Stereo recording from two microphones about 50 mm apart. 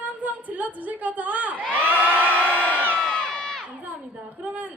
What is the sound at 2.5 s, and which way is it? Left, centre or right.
Crowd, left.